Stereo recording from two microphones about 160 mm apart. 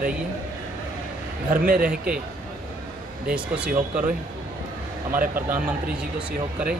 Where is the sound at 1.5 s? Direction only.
60° right (ahead or behind).